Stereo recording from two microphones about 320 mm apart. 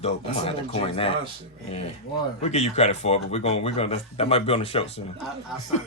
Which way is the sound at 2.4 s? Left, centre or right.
Centre.